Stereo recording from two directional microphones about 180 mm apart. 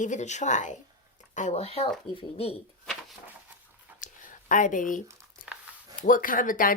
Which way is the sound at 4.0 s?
45° left (ahead or behind).